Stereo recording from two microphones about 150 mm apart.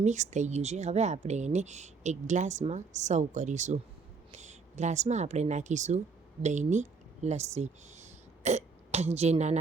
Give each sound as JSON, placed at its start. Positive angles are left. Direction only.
{"t": 0.0, "sound": "speech", "side_deg": -50}